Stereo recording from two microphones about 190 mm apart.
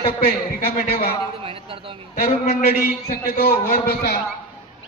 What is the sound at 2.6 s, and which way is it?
A man's voice, 55° left (ahead or behind).